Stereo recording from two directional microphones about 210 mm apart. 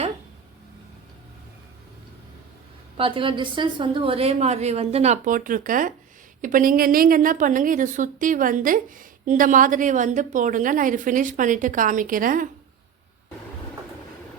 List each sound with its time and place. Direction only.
3.0 s a woman's voice: 25° right (ahead or behind); by 12.5 s 40° right (ahead or behind)